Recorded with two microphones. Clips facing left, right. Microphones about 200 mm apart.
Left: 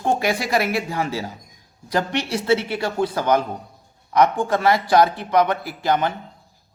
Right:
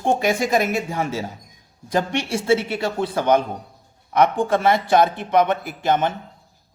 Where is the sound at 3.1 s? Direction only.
25° right (ahead or behind).